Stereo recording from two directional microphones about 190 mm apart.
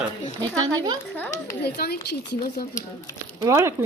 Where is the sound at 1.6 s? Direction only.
60° left (ahead or behind).